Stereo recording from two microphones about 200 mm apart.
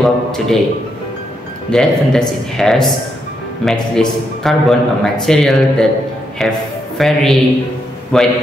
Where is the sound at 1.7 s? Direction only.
5° left (ahead or behind).